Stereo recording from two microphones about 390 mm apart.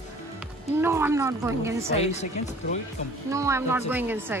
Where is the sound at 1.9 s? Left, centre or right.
Centre.